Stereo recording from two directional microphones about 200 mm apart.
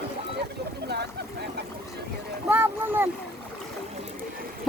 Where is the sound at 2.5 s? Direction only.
10° right (ahead or behind).